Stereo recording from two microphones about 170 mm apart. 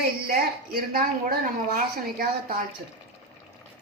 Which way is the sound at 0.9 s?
60° right (ahead or behind).